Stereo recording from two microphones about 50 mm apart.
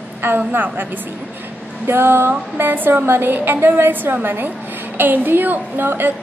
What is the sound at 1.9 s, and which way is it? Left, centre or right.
A woman's voice, right.